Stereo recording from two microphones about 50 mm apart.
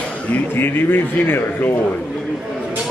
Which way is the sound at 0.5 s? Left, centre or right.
Left.